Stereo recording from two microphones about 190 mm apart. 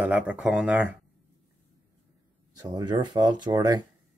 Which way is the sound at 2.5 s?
20° right (ahead or behind).